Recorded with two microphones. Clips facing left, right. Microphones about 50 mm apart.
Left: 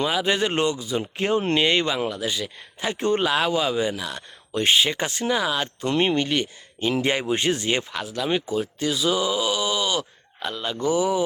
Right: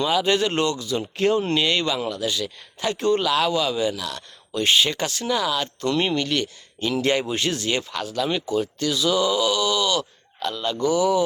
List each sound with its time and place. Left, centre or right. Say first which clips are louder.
0.0 s speech: right 2 dB; centre
7.9 s speech: even; centre